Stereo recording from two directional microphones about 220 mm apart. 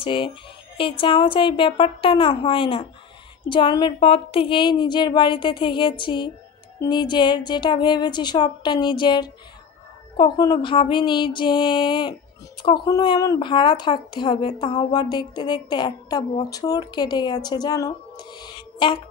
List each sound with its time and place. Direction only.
0.0 s a woman's voice: 25° left (ahead or behind)